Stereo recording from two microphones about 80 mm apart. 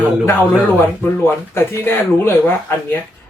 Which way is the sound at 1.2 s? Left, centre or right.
Left.